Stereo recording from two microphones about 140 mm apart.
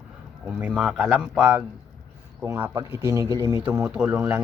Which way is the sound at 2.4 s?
15° right (ahead or behind).